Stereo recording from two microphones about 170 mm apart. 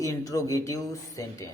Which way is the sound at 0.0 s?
20° left (ahead or behind).